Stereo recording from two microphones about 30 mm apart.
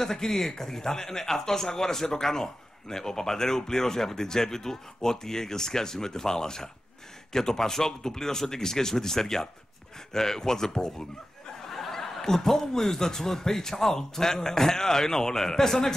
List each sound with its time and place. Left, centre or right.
0.0 s a man's voice: centre